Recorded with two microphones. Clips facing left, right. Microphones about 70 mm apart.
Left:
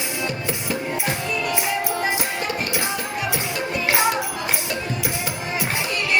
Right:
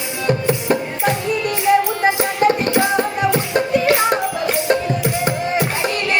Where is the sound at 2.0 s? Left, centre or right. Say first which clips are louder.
Right 9 dB; right.